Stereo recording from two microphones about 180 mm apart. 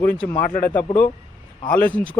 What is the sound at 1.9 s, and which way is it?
Speech, 10° left (ahead or behind).